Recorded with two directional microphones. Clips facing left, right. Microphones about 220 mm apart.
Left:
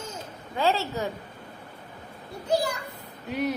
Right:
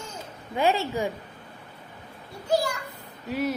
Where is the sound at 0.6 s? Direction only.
15° right (ahead or behind).